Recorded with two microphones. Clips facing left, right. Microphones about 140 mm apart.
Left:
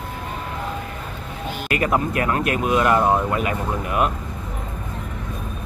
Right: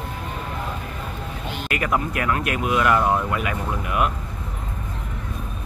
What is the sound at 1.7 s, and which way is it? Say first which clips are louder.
Speech: left 3 dB; 30° left (ahead or behind).